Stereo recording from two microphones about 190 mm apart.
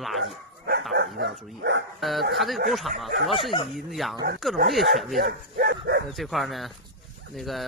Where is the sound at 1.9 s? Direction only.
Centre (ahead or behind).